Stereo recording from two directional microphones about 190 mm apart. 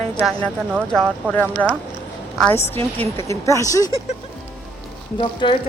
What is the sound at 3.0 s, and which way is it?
Speech, 15° left (ahead or behind).